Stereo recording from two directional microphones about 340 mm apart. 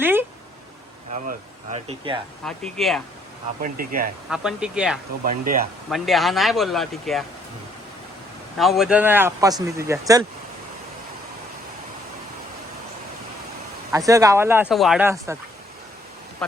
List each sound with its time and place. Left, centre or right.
0.0 s a sound: centre
1.1 s speech: centre
2.4 s speech: centre
3.6 s speech: right
4.3 s speech: centre
8.5 s speech: centre
13.9 s speech: centre